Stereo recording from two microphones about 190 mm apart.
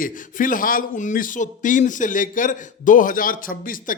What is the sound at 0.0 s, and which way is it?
A man's voice, 45° left (ahead or behind).